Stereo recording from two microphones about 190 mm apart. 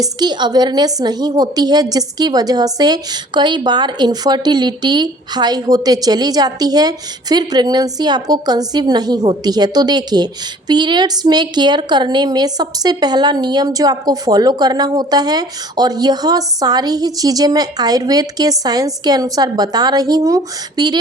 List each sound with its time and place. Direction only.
0.0 s a woman's voice: 20° right (ahead or behind)